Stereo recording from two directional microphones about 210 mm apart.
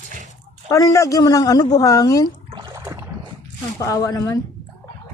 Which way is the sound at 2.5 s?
20° right (ahead or behind).